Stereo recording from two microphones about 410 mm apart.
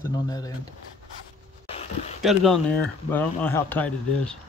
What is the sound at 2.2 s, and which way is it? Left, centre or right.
Speech, centre.